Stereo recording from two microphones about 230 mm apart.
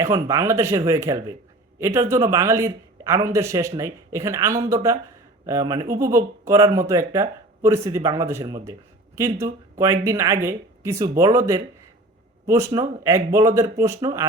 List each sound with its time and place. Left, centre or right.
0.0 s speech: centre